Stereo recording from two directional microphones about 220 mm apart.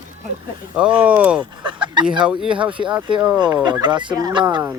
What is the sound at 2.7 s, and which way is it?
Speech, 20° right (ahead or behind).